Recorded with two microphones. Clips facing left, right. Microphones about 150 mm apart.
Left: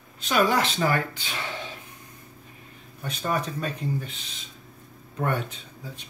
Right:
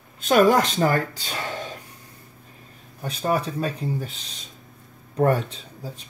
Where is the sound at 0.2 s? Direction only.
50° right (ahead or behind).